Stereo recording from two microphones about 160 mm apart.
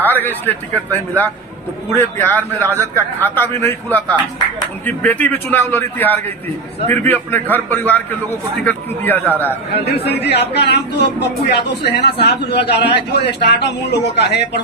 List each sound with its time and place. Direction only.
0.0 s a man's voice: 10° left (ahead or behind)
9.8 s a man's voice: 90° left